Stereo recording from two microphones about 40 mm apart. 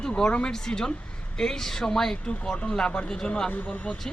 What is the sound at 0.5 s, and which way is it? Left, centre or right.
Speech, centre.